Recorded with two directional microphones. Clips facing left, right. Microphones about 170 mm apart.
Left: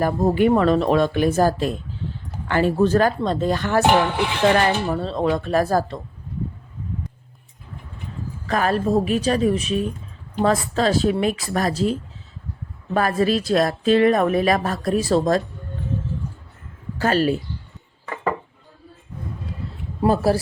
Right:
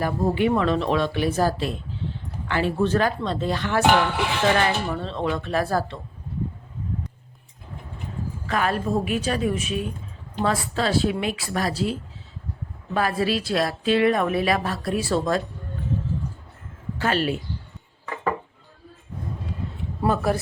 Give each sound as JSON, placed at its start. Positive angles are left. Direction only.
{"t": 0.0, "sound": "a woman's voice", "side_deg": 45}
{"t": 8.4, "sound": "a woman's voice", "side_deg": 40}
{"t": 17.0, "sound": "speech", "side_deg": 40}
{"t": 20.1, "sound": "speech", "side_deg": 35}